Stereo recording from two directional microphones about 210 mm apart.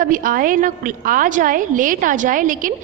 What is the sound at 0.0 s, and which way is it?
A woman's voice, 40° right (ahead or behind).